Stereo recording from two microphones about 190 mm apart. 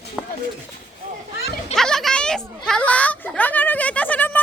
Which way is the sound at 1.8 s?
Centre (ahead or behind).